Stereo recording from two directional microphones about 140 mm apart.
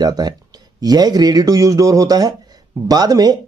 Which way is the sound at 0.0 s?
30° right (ahead or behind).